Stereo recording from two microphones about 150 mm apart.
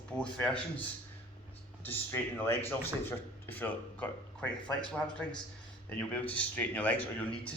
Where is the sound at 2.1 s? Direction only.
15° left (ahead or behind).